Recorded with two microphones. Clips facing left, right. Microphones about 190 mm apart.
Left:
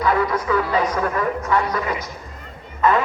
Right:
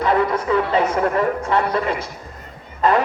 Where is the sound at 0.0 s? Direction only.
25° right (ahead or behind).